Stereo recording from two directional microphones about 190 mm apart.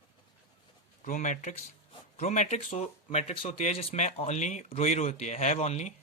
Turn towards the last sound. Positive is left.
turn(degrees=35)  # may be behind; listen again after turning